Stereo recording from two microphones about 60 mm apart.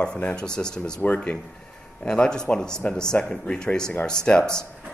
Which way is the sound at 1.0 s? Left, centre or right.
Left.